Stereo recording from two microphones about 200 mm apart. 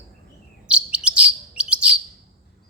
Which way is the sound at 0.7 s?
5° right (ahead or behind).